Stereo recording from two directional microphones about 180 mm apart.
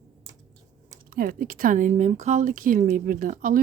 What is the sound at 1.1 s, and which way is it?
Speech, 55° right (ahead or behind).